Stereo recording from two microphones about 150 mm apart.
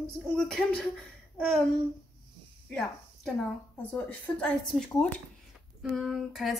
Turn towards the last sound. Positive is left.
turn(degrees=0)  # may be behind; listen again after turning